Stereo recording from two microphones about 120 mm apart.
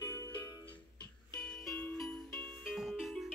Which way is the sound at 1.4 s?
10° left (ahead or behind).